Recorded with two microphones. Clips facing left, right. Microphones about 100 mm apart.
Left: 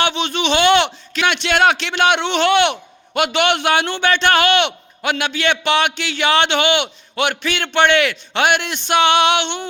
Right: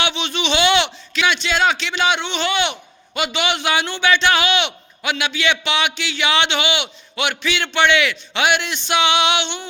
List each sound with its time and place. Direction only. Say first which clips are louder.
0.0 s a man's voice: left 3 dB; 45° left (ahead or behind)